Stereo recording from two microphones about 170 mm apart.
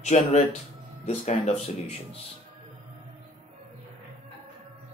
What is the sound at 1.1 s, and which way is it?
Speech, 40° left (ahead or behind).